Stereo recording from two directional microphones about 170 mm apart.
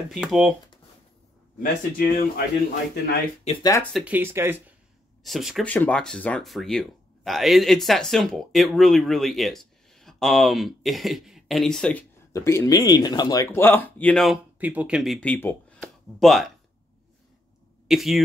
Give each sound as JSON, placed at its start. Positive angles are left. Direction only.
{"t": 0.1, "sound": "speech", "side_deg": 0}
{"t": 1.6, "sound": "speech", "side_deg": 55}
{"t": 3.9, "sound": "speech", "side_deg": -10}
{"t": 5.2, "sound": "speech", "side_deg": 0}
{"t": 12.3, "sound": "speech", "side_deg": 15}
{"t": 17.8, "sound": "speech", "side_deg": 0}